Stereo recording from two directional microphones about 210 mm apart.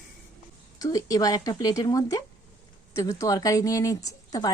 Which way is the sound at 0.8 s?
15° left (ahead or behind).